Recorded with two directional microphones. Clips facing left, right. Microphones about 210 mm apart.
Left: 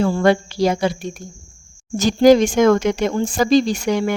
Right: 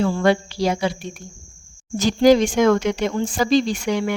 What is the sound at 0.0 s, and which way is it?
Speech, 45° left (ahead or behind).